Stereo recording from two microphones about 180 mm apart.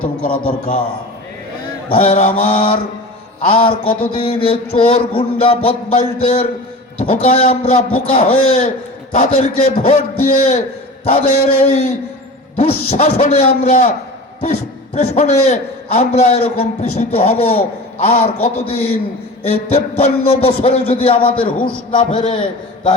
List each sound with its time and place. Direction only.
1.9 s a man's voice: 40° left (ahead or behind)
14.9 s a man's voice: 40° left (ahead or behind)